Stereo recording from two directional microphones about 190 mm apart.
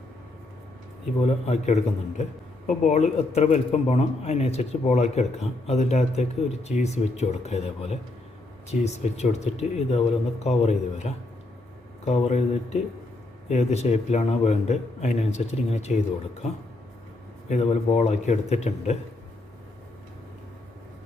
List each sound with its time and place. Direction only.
1.2 s a man's voice: 35° left (ahead or behind)